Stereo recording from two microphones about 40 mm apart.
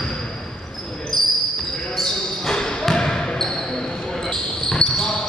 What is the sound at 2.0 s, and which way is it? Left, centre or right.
Basketball bounce, centre.